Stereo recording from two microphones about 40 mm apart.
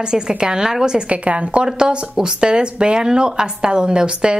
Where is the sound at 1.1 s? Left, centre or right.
Right.